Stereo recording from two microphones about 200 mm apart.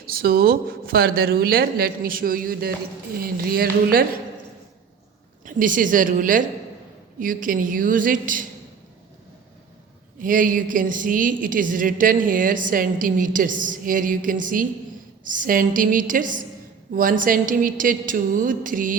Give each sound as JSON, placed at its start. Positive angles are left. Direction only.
{"t": 0.0, "sound": "a woman's voice", "side_deg": -50}
{"t": 5.5, "sound": "a woman's voice", "side_deg": -40}
{"t": 10.2, "sound": "a woman's voice", "side_deg": -40}